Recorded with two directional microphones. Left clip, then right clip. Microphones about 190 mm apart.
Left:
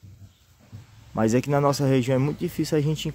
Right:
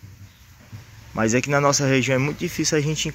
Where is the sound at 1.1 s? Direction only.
20° left (ahead or behind).